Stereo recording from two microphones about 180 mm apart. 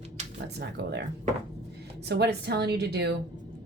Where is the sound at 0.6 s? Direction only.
75° right (ahead or behind).